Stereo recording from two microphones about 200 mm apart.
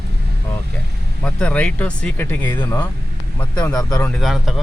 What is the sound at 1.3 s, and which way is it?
Speech, 5° left (ahead or behind).